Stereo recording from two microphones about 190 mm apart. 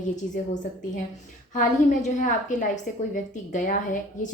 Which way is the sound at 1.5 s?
40° left (ahead or behind).